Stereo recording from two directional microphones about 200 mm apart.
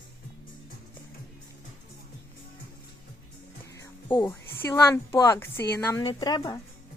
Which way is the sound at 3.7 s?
15° left (ahead or behind).